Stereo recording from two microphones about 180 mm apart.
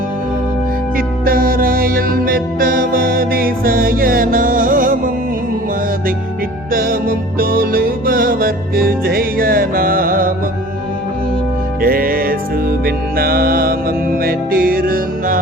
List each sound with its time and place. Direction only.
0.9 s music: 50° right (ahead or behind)
6.7 s music: 55° right (ahead or behind)
11.8 s music: 55° right (ahead or behind)